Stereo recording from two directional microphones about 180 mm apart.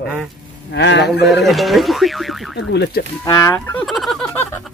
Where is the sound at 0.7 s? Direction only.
70° left (ahead or behind).